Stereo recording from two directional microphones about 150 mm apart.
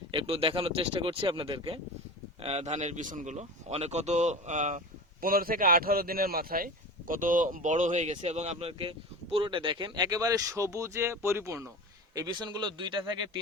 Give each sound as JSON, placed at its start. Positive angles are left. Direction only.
{"t": 0.1, "sound": "speech", "side_deg": -40}
{"t": 2.4, "sound": "speech", "side_deg": -45}
{"t": 5.2, "sound": "a man's voice", "side_deg": -75}
{"t": 7.1, "sound": "speech", "side_deg": -60}